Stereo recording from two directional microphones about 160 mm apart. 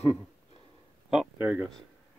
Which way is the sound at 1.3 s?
15° right (ahead or behind).